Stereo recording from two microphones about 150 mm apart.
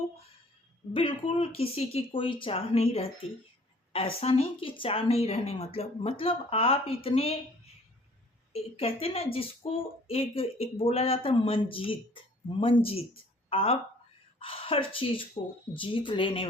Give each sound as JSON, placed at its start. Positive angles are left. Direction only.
{"t": 0.9, "sound": "a woman's voice", "side_deg": 35}
{"t": 8.5, "sound": "a woman's voice", "side_deg": 40}